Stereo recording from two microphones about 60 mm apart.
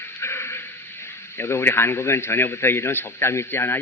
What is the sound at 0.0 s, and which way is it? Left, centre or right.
Speech, left.